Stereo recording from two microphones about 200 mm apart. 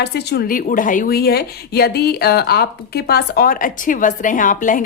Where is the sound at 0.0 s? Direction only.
55° left (ahead or behind).